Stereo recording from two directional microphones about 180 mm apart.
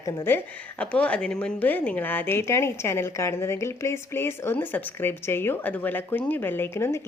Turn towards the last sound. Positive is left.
turn(degrees=15)  # may be behind; listen again after turning